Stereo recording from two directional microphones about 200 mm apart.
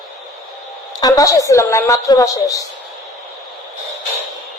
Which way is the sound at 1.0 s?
20° left (ahead or behind).